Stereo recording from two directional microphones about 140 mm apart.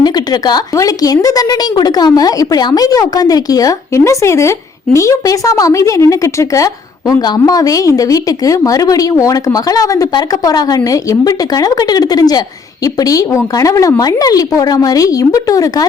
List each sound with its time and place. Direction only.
0.0 s a woman's voice: 30° left (ahead or behind)